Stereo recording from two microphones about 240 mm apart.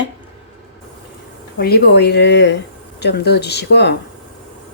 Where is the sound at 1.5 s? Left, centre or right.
Left.